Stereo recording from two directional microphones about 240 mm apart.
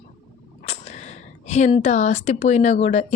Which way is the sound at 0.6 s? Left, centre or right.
Left.